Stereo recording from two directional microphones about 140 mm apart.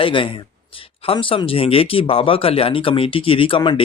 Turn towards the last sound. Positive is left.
turn(degrees=35)  # may be behind; listen again after turning